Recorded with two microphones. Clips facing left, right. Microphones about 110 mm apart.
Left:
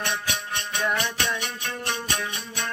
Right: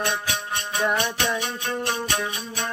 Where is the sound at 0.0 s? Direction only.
30° right (ahead or behind).